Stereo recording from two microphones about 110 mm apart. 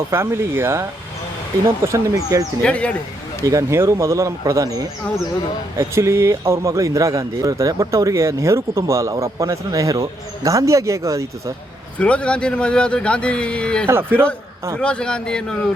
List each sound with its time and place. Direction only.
0.1 s speech: 20° right (ahead or behind)
2.6 s speech: 10° left (ahead or behind)
3.4 s speech: 30° right (ahead or behind)
11.9 s speech: 10° left (ahead or behind)
13.8 s speech: 20° right (ahead or behind)
14.8 s speech: 10° left (ahead or behind)